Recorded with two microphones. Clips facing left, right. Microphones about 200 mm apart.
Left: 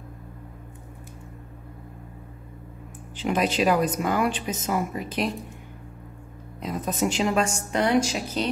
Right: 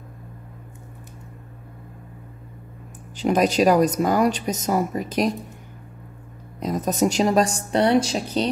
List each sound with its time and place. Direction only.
3.2 s a woman's voice: 40° right (ahead or behind)
6.6 s a woman's voice: 40° right (ahead or behind)